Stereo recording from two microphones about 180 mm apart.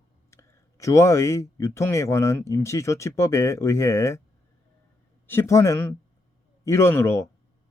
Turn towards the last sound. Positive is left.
turn(degrees=15)  # may be behind; listen again after turning